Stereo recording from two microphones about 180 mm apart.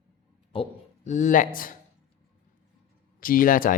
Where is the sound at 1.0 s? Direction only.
45° left (ahead or behind).